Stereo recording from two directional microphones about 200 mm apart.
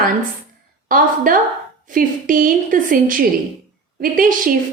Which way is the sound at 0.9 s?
45° right (ahead or behind).